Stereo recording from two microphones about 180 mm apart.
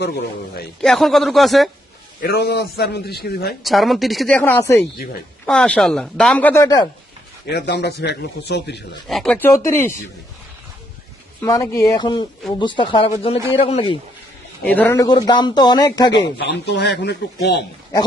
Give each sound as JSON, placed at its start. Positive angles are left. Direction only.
{"t": 0.0, "sound": "a man's voice", "side_deg": 60}
{"t": 0.8, "sound": "speech", "side_deg": 0}
{"t": 2.2, "sound": "a man's voice", "side_deg": 65}
{"t": 3.6, "sound": "speech", "side_deg": 0}
{"t": 7.4, "sound": "speech", "side_deg": 65}
{"t": 9.0, "sound": "speech", "side_deg": 0}
{"t": 11.3, "sound": "speech", "side_deg": 20}
{"t": 14.6, "sound": "speech", "side_deg": 10}
{"t": 14.9, "sound": "speech", "side_deg": 20}
{"t": 16.5, "sound": "speech", "side_deg": 75}